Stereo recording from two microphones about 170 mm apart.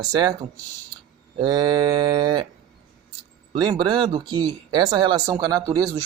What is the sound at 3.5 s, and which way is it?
Speech, 25° right (ahead or behind).